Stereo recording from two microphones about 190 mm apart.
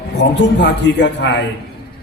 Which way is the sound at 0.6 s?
65° left (ahead or behind).